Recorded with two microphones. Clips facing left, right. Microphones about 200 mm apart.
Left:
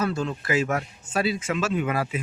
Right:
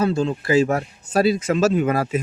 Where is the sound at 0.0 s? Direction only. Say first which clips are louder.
Right 6 dB; 30° right (ahead or behind).